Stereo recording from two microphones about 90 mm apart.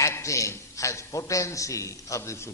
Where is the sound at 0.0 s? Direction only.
35° left (ahead or behind).